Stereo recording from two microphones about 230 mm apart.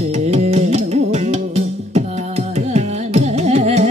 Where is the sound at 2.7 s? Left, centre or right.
Right.